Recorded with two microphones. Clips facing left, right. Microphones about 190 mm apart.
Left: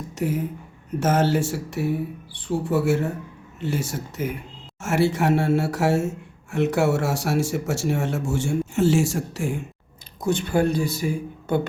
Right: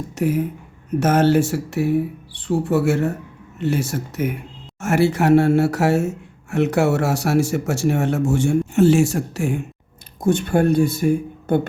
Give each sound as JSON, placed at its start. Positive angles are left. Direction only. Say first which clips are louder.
{"t": 0.2, "sound": "speech", "louder": "right 5 dB", "side_deg": -65}
{"t": 10.2, "sound": "speech", "louder": "right 4 dB", "side_deg": -55}